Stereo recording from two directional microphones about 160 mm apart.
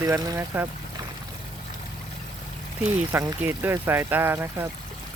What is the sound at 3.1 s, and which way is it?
Speech, 15° right (ahead or behind).